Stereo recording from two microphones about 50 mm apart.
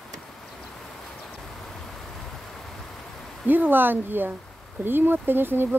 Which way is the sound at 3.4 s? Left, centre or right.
Right.